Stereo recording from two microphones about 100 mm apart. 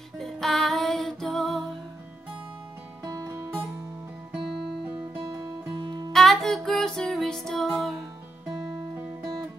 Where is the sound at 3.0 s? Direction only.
35° right (ahead or behind).